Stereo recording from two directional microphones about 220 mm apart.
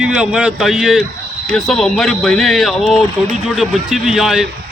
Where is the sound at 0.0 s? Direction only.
5° right (ahead or behind).